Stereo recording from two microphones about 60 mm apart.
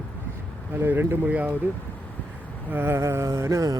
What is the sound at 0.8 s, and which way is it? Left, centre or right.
Speech, right.